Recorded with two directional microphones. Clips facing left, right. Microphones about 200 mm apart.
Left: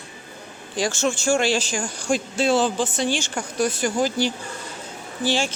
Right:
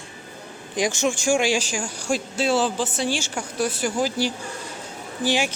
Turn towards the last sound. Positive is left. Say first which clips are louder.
# even
turn(degrees=-15)  # may be behind; listen again after turning